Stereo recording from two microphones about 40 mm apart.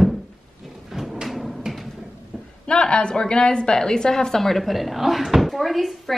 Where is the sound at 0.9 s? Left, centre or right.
Centre.